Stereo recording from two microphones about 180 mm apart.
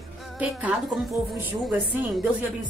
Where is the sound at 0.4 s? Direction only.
5° right (ahead or behind).